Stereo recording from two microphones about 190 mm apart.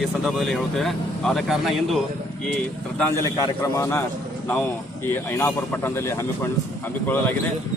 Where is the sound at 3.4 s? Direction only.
15° left (ahead or behind).